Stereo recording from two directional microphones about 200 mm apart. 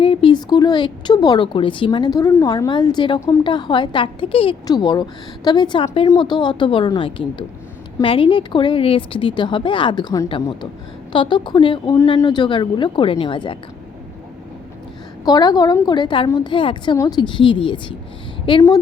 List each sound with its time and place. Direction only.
0.0 s a woman's voice: 25° left (ahead or behind)
15.2 s a woman's voice: 20° left (ahead or behind)